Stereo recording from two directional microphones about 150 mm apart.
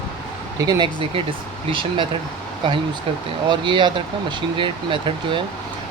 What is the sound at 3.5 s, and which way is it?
Speech, 30° right (ahead or behind).